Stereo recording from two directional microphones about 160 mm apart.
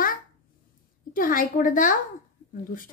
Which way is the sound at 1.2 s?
60° left (ahead or behind).